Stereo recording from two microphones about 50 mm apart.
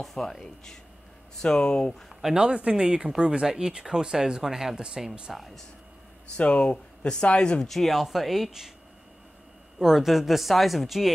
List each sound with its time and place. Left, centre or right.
0.0 s speech: centre
2.3 s speech: right
5.3 s speech: centre
6.3 s speech: left
7.6 s speech: centre
9.8 s speech: centre